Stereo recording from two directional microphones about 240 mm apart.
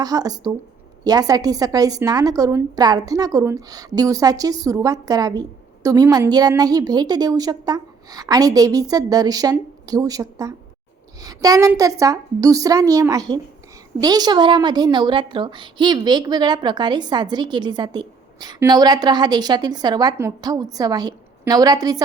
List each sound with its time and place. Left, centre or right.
0.0 s a woman's voice: centre